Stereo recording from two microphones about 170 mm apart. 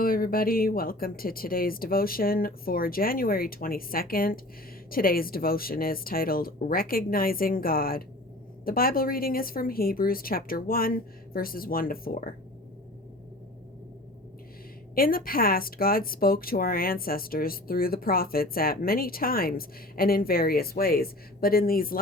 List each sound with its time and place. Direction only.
0.0 s speech: 60° left (ahead or behind)
14.9 s speech: 60° left (ahead or behind)